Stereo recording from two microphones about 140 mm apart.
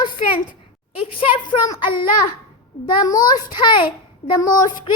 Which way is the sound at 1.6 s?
30° left (ahead or behind).